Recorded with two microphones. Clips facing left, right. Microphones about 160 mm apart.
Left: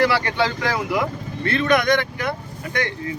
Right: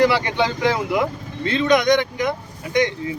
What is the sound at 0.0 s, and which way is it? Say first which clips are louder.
Speech: right 2 dB; 15° right (ahead or behind).